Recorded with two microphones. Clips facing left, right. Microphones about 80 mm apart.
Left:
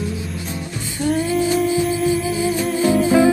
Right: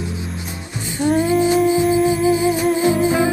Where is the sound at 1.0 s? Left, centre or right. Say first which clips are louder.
Right 3 dB; right.